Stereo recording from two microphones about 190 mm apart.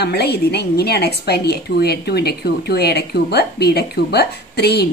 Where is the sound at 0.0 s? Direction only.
60° left (ahead or behind).